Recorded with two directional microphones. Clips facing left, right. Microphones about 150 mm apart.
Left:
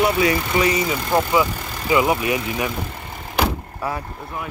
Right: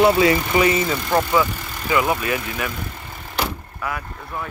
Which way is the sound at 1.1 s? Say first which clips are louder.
Left 1 dB; 15° left (ahead or behind).